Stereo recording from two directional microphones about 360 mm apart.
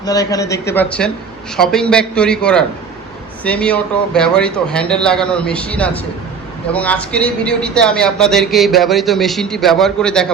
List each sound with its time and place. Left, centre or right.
0.0 s speech: centre